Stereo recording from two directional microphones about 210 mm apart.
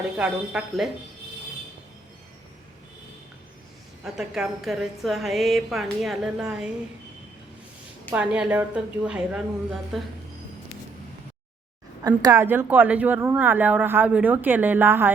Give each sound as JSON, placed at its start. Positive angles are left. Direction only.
{"t": 0.2, "sound": "a woman's voice", "side_deg": -5}
{"t": 4.0, "sound": "a woman's voice", "side_deg": 0}
{"t": 8.1, "sound": "a woman's voice", "side_deg": -5}
{"t": 12.0, "sound": "speech", "side_deg": -15}